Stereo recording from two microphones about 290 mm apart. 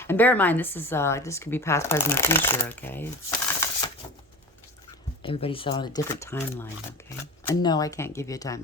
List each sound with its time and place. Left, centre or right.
0.0 s speech: centre
3.6 s typewriter: centre
5.2 s speech: centre